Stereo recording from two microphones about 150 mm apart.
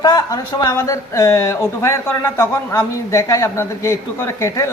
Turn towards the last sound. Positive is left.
turn(degrees=20)  # may be behind; listen again after turning